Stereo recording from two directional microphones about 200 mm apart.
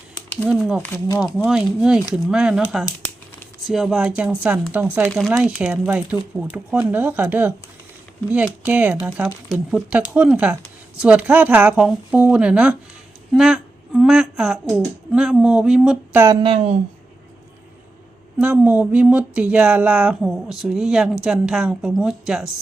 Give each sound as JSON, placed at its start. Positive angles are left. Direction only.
{"t": 0.4, "sound": "speech", "side_deg": 0}
{"t": 1.2, "sound": "speech", "side_deg": -5}
{"t": 16.2, "sound": "speech", "side_deg": -20}
{"t": 18.3, "sound": "speech", "side_deg": -5}